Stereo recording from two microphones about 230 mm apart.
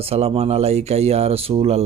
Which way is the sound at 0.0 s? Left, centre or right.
Right.